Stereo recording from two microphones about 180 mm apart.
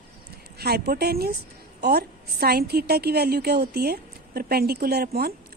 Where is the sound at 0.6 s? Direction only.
60° right (ahead or behind).